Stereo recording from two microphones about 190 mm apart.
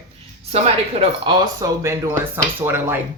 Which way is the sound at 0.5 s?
30° right (ahead or behind).